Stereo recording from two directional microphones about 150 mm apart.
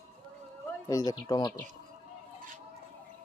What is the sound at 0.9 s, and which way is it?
Speech, 25° left (ahead or behind).